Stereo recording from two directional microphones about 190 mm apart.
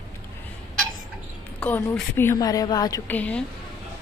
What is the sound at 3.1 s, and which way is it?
Speech, 5° left (ahead or behind).